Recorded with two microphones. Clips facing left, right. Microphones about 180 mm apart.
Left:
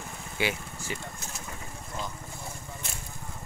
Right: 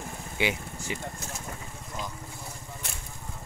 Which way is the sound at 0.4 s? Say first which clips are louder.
Right 1 dB; 20° right (ahead or behind).